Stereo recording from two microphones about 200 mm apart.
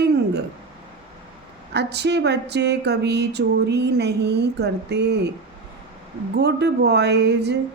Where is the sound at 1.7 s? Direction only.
55° right (ahead or behind).